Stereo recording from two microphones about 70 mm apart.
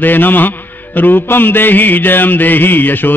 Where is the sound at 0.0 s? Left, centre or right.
Left.